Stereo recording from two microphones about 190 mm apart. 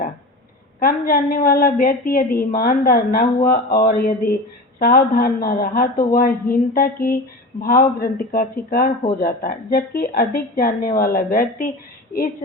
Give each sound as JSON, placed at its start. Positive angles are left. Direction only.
{"t": 0.8, "sound": "a man's voice", "side_deg": 50}